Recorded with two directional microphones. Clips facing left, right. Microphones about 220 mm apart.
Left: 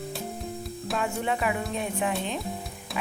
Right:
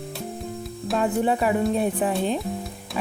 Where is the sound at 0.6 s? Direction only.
Centre (ahead or behind).